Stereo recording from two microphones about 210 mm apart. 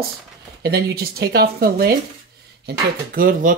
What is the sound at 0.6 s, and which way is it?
Speech, 50° right (ahead or behind).